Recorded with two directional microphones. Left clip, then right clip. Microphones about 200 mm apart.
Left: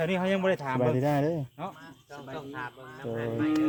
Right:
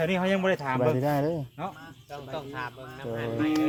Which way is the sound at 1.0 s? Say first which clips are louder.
Even; 20° left (ahead or behind).